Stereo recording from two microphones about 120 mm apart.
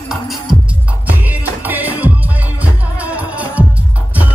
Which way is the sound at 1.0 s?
15° right (ahead or behind).